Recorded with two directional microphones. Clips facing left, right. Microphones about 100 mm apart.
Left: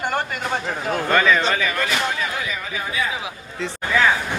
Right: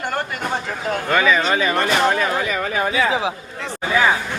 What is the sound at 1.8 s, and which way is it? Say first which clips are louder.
Speech: right 6 dB; 45° right (ahead or behind).